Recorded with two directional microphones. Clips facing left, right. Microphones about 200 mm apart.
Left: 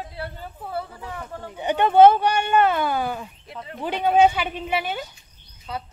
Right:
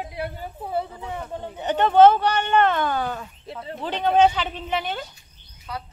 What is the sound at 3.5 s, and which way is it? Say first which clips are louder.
Speech: right 6 dB; 30° right (ahead or behind).